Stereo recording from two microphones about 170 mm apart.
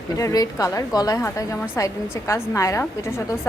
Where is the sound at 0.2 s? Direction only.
20° left (ahead or behind).